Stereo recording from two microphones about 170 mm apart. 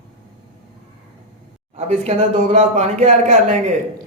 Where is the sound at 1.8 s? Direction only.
40° right (ahead or behind).